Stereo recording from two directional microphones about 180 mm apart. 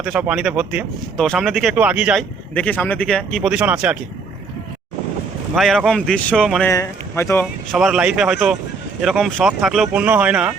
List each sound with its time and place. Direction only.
0.0 s speech: 5° right (ahead or behind)
2.6 s speech: 10° left (ahead or behind)
5.5 s speech: centre (ahead or behind)
6.7 s speech: 15° left (ahead or behind)
7.7 s speech: centre (ahead or behind)